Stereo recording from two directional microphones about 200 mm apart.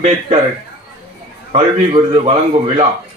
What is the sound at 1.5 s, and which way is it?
Speech, 30° right (ahead or behind).